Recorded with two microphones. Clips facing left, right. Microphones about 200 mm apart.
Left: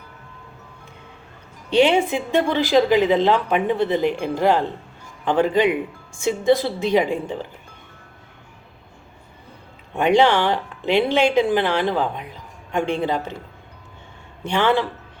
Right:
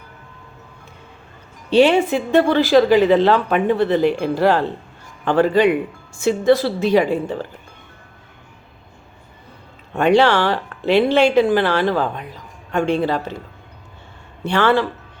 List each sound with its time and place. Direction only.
1.7 s speech: 15° left (ahead or behind)
9.9 s speech: 15° left (ahead or behind)
14.4 s speech: 15° left (ahead or behind)